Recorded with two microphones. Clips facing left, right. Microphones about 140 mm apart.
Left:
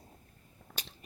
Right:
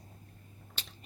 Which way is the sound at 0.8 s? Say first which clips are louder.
Left 3 dB; 45° left (ahead or behind).